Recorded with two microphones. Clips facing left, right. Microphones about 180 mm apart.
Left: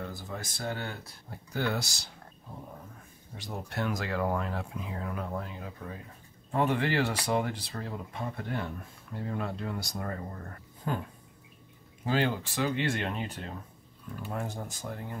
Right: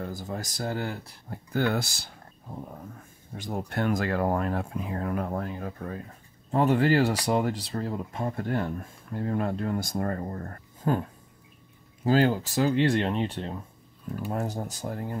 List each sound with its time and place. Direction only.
0.0 s speech: 40° right (ahead or behind)
1.5 s speech: 55° right (ahead or behind)
3.3 s speech: 50° right (ahead or behind)
6.5 s speech: 40° right (ahead or behind)
12.0 s speech: 40° right (ahead or behind)